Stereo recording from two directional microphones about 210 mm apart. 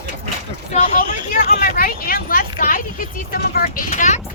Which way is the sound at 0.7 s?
35° left (ahead or behind).